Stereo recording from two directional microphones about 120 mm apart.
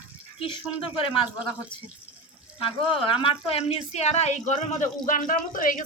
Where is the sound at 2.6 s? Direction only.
45° left (ahead or behind).